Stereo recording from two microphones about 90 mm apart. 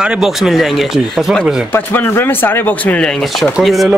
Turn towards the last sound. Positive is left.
turn(degrees=0)  # may be behind; listen again after turning